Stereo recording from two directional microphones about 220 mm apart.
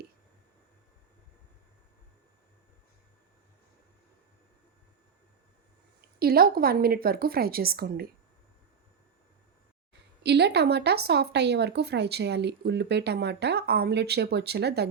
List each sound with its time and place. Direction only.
6.1 s speech: 45° right (ahead or behind)
9.9 s speech: 50° right (ahead or behind)